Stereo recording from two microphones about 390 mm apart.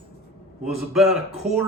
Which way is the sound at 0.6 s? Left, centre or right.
Centre.